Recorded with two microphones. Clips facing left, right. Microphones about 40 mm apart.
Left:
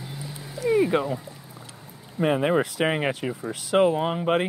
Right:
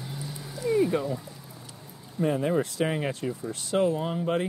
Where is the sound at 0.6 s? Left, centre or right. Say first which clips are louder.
Left 3 dB; left.